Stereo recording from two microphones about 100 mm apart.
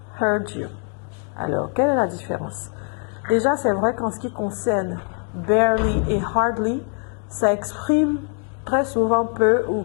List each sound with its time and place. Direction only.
0.2 s a woman's voice: 15° left (ahead or behind)